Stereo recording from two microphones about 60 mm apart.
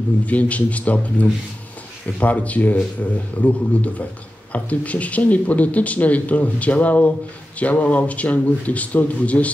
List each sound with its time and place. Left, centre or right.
0.3 s speech: left